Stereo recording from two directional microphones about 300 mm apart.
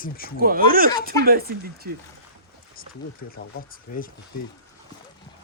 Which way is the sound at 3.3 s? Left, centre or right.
Left.